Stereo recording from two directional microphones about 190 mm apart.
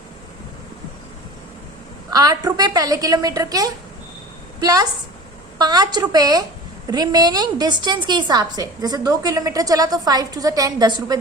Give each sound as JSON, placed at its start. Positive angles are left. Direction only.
{"t": 2.0, "sound": "a woman's voice", "side_deg": -20}